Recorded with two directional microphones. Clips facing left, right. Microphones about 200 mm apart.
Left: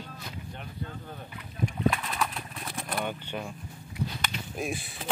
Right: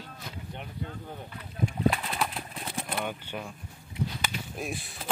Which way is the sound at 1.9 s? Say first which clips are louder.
Even; 30° right (ahead or behind).